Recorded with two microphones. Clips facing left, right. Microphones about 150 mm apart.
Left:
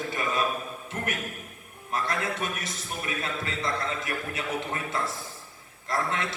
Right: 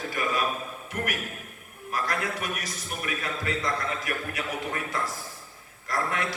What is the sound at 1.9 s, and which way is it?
A man's voice, 25° left (ahead or behind).